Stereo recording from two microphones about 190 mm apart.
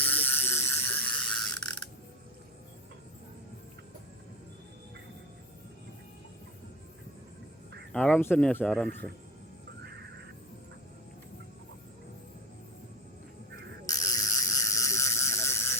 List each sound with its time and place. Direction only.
0.0 s ratchet: 10° left (ahead or behind)
7.9 s speech: 5° left (ahead or behind)
9.8 s music: 60° right (ahead or behind)
13.8 s a sound: 20° left (ahead or behind)